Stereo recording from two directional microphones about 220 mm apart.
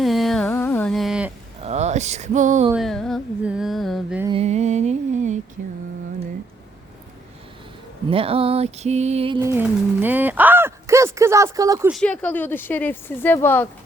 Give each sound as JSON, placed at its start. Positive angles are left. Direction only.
{"t": 0.0, "sound": "carnatic music", "side_deg": 0}
{"t": 1.6, "sound": "speech", "side_deg": -30}
{"t": 2.7, "sound": "music", "side_deg": 0}
{"t": 4.3, "sound": "music", "side_deg": -30}
{"t": 5.6, "sound": "mantra", "side_deg": -40}
{"t": 8.1, "sound": "music", "side_deg": -25}
{"t": 11.9, "sound": "speech", "side_deg": 5}